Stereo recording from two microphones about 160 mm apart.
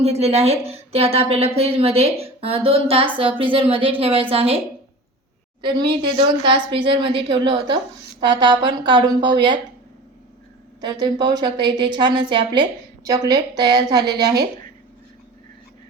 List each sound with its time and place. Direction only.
0.0 s a woman's voice: 40° right (ahead or behind)
5.6 s a woman's voice: 30° right (ahead or behind)
11.0 s a woman's voice: 25° right (ahead or behind)